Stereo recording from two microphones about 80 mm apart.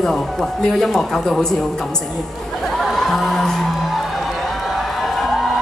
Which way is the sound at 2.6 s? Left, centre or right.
Centre.